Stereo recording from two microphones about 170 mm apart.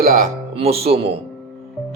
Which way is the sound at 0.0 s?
50° right (ahead or behind).